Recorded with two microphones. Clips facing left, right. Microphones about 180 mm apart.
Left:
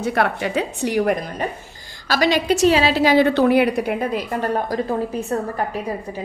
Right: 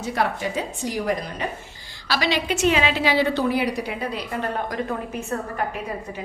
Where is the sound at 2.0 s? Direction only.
45° left (ahead or behind).